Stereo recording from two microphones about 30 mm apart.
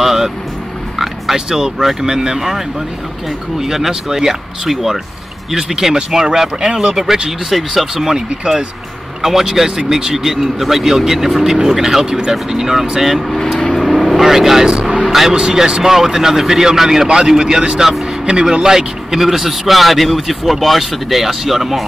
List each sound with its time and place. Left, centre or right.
0.0 s vehicle: centre
0.9 s a sound: centre
1.3 s speech: centre
5.5 s speech: centre
7.2 s speech: centre
7.9 s speech: centre
13.7 s vehicle: centre
14.8 s vehicle: right
15.0 s speech: centre
15.5 s speech: right; by 21.8 s centre